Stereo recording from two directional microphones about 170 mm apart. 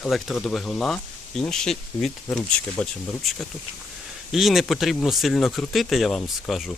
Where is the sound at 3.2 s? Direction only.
Centre (ahead or behind).